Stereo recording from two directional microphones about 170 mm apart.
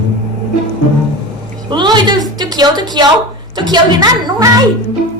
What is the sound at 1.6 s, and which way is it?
A woman's voice, 25° right (ahead or behind).